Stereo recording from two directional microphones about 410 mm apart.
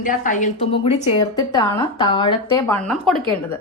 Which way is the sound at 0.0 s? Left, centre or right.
Centre.